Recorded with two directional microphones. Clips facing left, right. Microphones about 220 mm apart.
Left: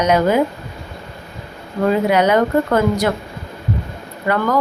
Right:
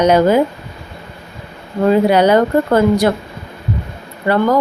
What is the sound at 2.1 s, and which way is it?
A woman's voice, 30° right (ahead or behind).